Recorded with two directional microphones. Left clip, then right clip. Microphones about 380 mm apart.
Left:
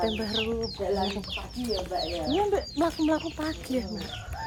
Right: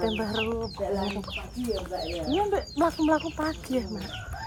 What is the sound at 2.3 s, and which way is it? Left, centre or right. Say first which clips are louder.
Speech: right 1 dB; centre.